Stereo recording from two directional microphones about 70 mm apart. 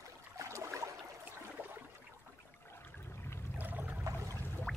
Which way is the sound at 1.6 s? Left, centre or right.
Right.